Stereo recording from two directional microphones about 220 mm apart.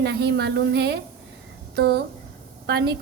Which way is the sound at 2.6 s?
50° right (ahead or behind).